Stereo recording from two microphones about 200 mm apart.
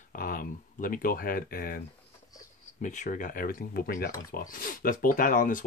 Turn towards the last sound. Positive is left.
turn(degrees=40)  # may be behind; listen again after turning